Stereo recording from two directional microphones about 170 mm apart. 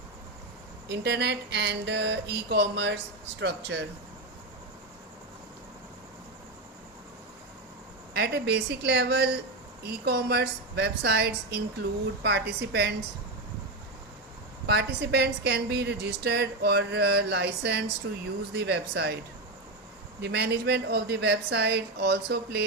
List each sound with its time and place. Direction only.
0.9 s a sound: 85° right
8.1 s a woman's voice: 75° right (ahead or behind)
14.7 s a woman's voice: 80° right
20.2 s a woman's voice: 75° right (ahead or behind)